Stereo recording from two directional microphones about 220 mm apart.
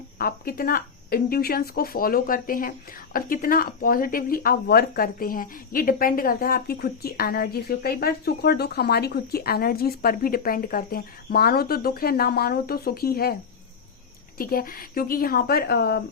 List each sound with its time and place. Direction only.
0.2 s speech: 40° left (ahead or behind)
14.3 s speech: 40° left (ahead or behind)